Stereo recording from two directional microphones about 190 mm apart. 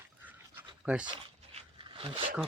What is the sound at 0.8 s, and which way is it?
Speech, 5° right (ahead or behind).